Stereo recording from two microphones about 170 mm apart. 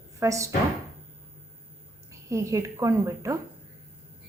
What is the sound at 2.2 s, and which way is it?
A woman's voice, 20° right (ahead or behind).